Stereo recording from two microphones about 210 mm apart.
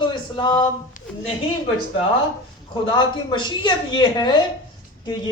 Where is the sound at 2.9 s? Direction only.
20° left (ahead or behind).